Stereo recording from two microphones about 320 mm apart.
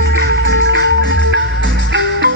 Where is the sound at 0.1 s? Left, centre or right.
Right.